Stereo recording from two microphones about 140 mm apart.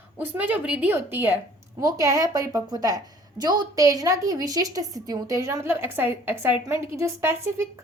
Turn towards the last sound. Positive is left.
turn(degrees=-15)  # may be behind; listen again after turning